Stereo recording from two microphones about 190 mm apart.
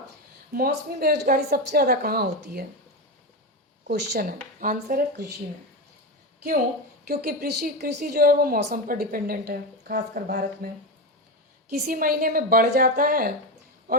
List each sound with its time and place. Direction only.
0.5 s a woman's voice: 55° right (ahead or behind)
3.8 s speech: 55° right (ahead or behind)
7.1 s a woman's voice: 55° right (ahead or behind)
11.7 s a woman's voice: 50° right (ahead or behind)